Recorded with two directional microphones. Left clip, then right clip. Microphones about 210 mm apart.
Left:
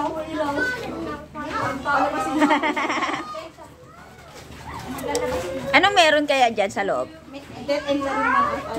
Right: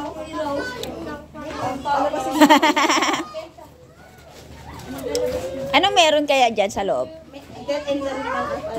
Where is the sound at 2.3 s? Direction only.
40° right (ahead or behind).